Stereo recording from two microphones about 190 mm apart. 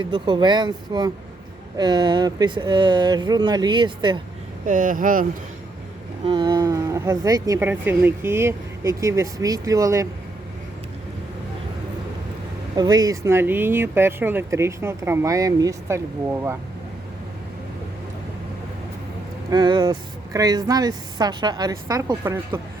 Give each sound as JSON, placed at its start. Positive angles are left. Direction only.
{"t": 0.0, "sound": "a woman's voice", "side_deg": -25}
{"t": 4.6, "sound": "speech", "side_deg": -45}
{"t": 6.2, "sound": "speech", "side_deg": -25}
{"t": 12.7, "sound": "speech", "side_deg": -20}
{"t": 19.5, "sound": "a woman's voice", "side_deg": -20}